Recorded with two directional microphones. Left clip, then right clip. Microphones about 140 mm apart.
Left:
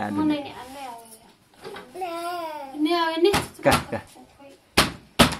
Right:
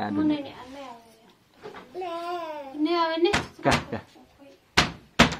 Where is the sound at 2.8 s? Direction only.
35° right (ahead or behind).